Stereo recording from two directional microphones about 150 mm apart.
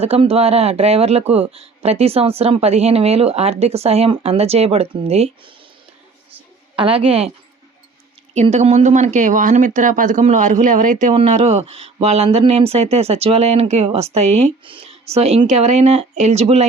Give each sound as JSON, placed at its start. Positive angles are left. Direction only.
{"t": 0.0, "sound": "speech", "side_deg": -40}
{"t": 6.7, "sound": "a woman's voice", "side_deg": -35}
{"t": 8.4, "sound": "speech", "side_deg": -45}